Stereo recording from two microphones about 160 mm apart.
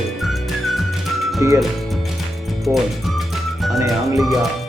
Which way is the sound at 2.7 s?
Centre (ahead or behind).